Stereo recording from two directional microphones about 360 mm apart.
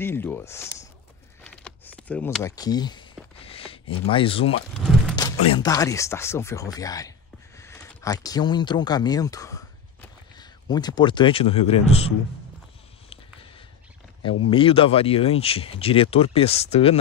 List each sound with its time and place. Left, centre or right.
0.0 s speech: centre
1.4 s a sound: centre
3.8 s speech: left
4.1 s a man's voice: centre
14.5 s speech: centre